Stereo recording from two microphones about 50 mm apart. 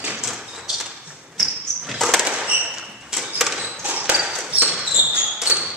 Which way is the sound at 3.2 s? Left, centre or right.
Centre.